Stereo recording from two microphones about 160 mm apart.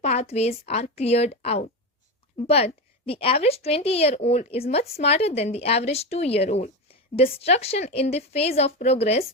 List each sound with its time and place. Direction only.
0.0 s a woman's voice: 40° left (ahead or behind)